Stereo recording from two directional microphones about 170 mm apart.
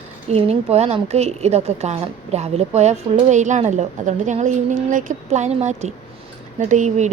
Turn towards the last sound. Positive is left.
turn(degrees=-45)  # may be behind; listen again after turning